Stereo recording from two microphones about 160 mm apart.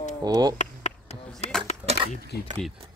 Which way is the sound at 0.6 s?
45° left (ahead or behind).